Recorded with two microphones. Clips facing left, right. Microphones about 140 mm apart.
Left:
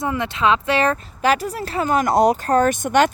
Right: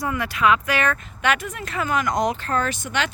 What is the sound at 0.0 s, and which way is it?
Speech, 25° left (ahead or behind).